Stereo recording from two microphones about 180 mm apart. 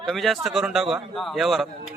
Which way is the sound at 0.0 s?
Centre (ahead or behind).